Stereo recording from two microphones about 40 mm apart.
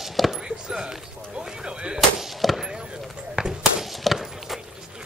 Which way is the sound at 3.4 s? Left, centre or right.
Right.